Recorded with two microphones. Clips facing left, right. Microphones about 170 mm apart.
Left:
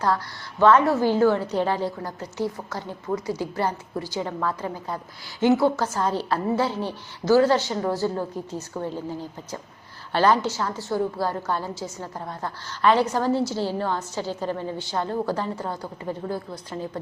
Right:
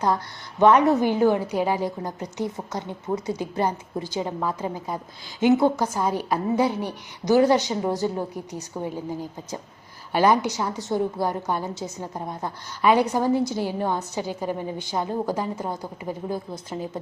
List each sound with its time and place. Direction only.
0.6 s a woman's voice: 15° right (ahead or behind)
10.1 s a woman's voice: 10° right (ahead or behind)